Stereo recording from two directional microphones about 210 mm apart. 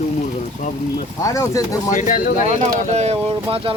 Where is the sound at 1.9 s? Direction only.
40° left (ahead or behind).